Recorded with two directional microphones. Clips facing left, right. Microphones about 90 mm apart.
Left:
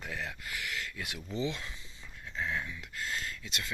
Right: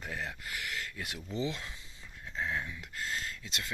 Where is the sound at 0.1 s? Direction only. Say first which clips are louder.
Even; 30° right (ahead or behind).